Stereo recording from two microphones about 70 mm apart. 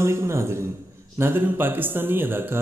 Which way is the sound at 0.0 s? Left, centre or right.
Right.